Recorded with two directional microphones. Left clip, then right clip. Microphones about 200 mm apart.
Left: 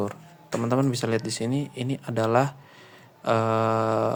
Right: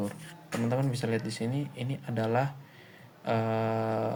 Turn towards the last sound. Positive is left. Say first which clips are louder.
# left 7 dB
turn(degrees=50)  # may be behind; listen again after turning